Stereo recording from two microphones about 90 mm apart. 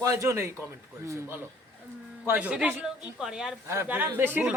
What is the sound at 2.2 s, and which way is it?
Speech, 20° right (ahead or behind).